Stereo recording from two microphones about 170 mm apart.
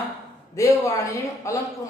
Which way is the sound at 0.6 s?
20° left (ahead or behind).